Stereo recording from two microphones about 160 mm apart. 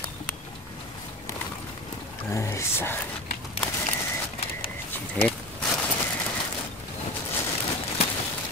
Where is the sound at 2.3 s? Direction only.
15° left (ahead or behind).